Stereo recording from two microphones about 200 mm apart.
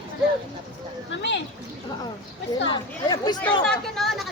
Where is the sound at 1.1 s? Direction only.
60° left (ahead or behind).